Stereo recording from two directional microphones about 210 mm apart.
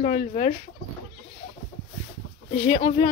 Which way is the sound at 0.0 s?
35° left (ahead or behind).